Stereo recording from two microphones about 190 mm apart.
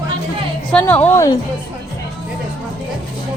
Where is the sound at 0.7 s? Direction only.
5° left (ahead or behind).